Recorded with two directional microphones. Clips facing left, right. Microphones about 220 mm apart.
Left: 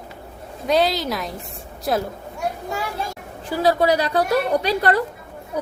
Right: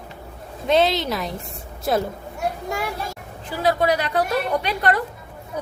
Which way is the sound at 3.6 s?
35° left (ahead or behind).